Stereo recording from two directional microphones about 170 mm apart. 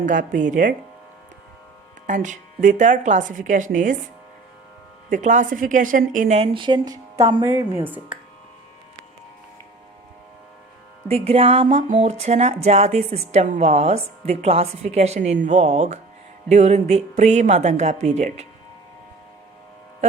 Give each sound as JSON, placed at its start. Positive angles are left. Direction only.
{"t": 0.0, "sound": "a woman's voice", "side_deg": -50}
{"t": 2.0, "sound": "a woman's voice", "side_deg": -45}
{"t": 5.0, "sound": "a woman's voice", "side_deg": -50}
{"t": 7.5, "sound": "speech", "side_deg": -10}
{"t": 11.1, "sound": "speech", "side_deg": -35}